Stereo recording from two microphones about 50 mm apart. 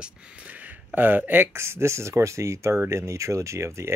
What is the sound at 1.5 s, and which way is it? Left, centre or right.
Speech, right.